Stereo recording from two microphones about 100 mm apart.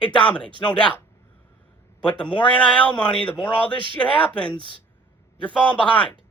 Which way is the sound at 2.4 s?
10° left (ahead or behind).